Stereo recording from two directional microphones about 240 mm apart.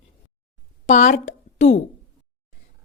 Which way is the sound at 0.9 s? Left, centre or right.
Left.